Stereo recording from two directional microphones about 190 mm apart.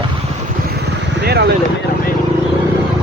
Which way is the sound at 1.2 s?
60° right (ahead or behind).